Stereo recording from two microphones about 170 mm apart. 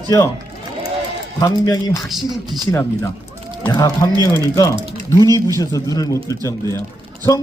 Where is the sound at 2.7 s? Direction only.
15° left (ahead or behind).